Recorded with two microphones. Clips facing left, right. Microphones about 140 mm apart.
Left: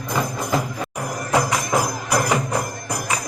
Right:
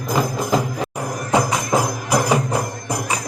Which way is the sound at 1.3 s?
25° right (ahead or behind).